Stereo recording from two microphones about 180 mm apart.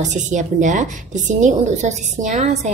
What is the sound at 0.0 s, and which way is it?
A woman's voice, 40° right (ahead or behind).